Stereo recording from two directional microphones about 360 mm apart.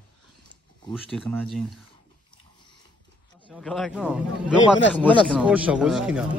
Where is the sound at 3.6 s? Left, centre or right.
Centre.